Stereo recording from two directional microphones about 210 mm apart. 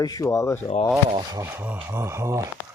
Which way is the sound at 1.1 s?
10° right (ahead or behind).